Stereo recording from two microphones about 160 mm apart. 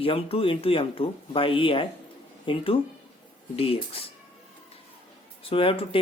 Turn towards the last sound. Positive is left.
turn(degrees=35)  # may be behind; listen again after turning